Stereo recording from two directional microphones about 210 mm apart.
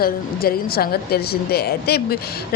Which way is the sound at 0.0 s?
45° left (ahead or behind).